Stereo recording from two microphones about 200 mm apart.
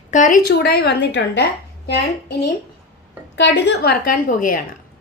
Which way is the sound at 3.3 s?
60° left (ahead or behind).